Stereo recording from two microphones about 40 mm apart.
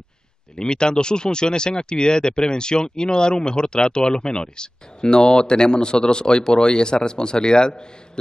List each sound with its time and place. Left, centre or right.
0.6 s speech: left